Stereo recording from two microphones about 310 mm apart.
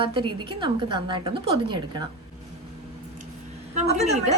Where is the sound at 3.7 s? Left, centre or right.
Right.